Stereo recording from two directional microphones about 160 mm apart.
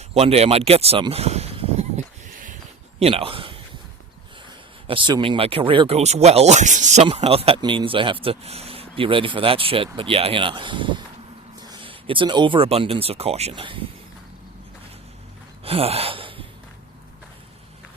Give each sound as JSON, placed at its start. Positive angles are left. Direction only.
{"t": 0.1, "sound": "speech", "side_deg": -40}
{"t": 3.0, "sound": "speech", "side_deg": -35}
{"t": 4.9, "sound": "speech", "side_deg": -30}
{"t": 15.6, "sound": "gasp", "side_deg": -35}